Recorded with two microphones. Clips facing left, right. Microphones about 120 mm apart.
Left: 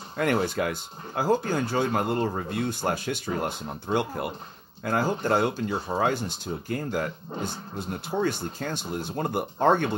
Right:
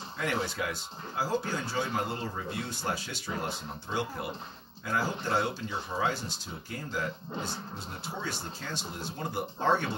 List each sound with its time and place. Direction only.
0.2 s speech: 55° left (ahead or behind)